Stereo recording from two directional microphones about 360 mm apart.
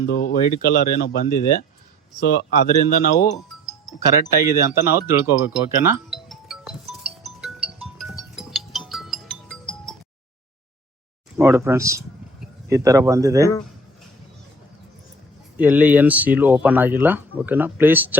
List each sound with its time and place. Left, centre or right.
0.0 s speech: left
3.7 s speech: centre
6.2 s music: centre
11.3 s a sound: centre
12.7 s speech: centre
15.5 s speech: centre